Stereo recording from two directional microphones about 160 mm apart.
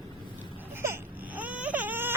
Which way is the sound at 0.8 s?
10° right (ahead or behind).